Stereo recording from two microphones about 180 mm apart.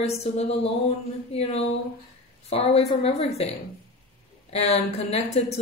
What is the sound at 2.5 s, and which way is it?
Speech, 35° left (ahead or behind).